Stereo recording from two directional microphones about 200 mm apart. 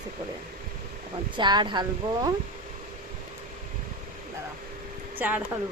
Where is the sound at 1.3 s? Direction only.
20° right (ahead or behind).